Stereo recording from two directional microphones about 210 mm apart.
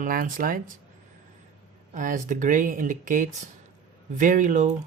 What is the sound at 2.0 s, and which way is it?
Speech, 35° right (ahead or behind).